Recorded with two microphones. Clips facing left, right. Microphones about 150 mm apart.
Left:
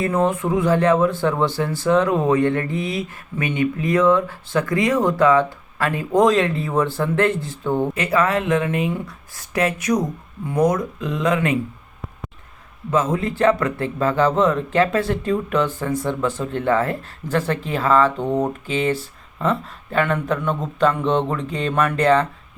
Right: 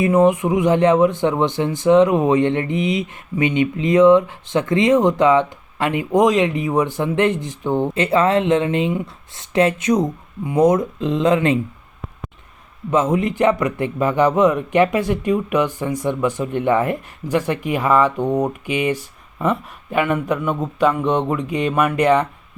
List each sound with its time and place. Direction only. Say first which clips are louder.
0.0 s a man's voice: right 5 dB; 15° right (ahead or behind)
12.9 s speech: right 3 dB; 20° right (ahead or behind)